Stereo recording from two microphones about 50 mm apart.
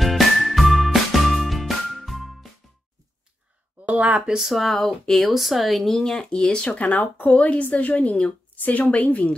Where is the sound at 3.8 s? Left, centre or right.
Right.